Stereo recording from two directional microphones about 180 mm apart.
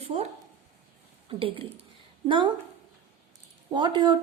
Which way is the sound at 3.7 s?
25° right (ahead or behind).